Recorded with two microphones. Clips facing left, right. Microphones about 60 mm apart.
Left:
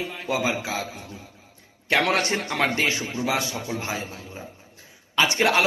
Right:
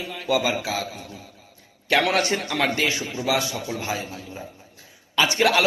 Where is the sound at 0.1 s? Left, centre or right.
Left.